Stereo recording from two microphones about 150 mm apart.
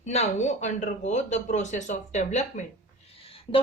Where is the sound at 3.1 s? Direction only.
40° left (ahead or behind).